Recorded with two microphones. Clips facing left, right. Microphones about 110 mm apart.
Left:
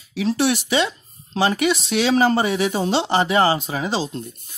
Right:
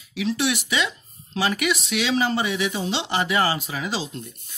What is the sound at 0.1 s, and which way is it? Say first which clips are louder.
Speech: left 4 dB; 35° left (ahead or behind).